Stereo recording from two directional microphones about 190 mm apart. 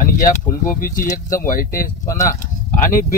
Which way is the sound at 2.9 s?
45° left (ahead or behind).